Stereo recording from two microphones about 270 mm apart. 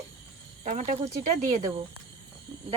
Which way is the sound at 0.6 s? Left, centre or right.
Right.